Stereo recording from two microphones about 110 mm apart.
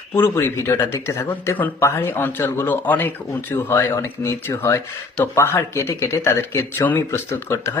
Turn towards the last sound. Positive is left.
turn(degrees=25)  # may be behind; listen again after turning